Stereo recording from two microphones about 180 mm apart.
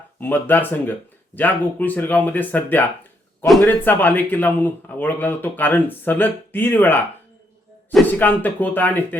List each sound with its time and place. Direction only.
0.2 s speech: 10° left (ahead or behind)